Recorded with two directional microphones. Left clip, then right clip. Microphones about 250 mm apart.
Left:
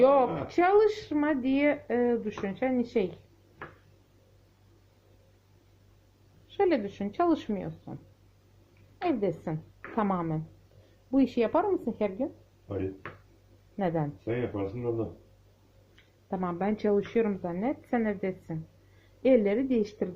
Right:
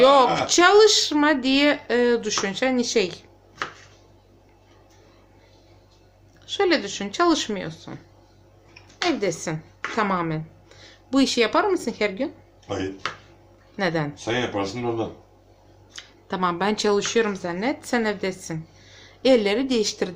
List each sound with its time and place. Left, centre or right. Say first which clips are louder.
0.0 s speech: right 7 dB; centre
6.6 s a woman's voice: right 5 dB; centre
9.0 s a woman's voice: right 6 dB; centre
13.7 s speech: right 6 dB; centre
16.3 s a woman's voice: right 8 dB; centre